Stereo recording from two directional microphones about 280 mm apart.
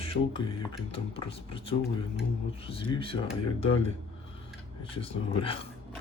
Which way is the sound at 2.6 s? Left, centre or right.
Centre.